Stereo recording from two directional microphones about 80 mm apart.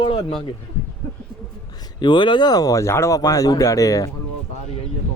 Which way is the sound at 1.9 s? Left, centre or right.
Left.